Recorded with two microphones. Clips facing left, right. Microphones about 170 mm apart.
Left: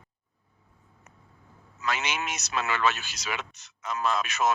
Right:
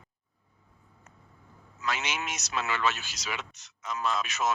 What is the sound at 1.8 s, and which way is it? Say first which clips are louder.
A man's voice: left 2 dB; 60° left (ahead or behind).